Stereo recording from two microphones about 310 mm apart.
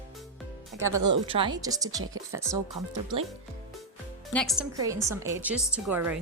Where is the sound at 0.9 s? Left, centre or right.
Right.